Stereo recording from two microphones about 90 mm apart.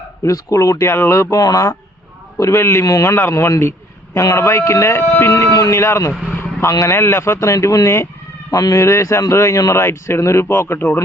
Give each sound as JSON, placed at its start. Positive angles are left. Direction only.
{"t": 0.2, "sound": "a man's voice", "side_deg": 40}
{"t": 2.4, "sound": "a man's voice", "side_deg": 30}
{"t": 5.4, "sound": "a man's voice", "side_deg": 40}